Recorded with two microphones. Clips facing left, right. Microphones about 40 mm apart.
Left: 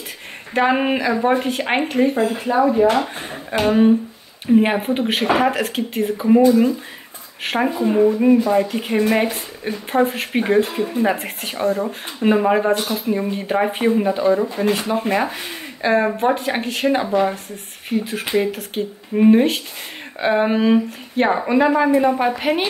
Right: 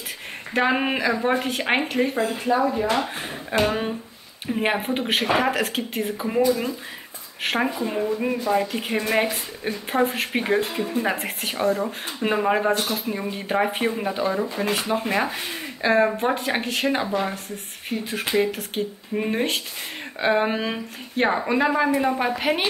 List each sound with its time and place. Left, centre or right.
0.6 s a woman's voice: centre
7.4 s a woman's voice: centre